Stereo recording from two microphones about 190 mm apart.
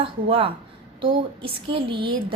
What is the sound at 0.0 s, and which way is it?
A woman's voice, 30° right (ahead or behind).